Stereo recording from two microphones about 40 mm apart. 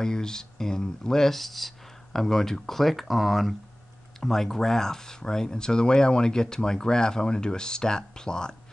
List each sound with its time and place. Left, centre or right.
0.0 s speech: centre